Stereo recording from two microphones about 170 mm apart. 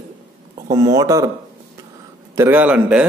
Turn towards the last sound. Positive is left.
turn(degrees=-5)  # may be behind; listen again after turning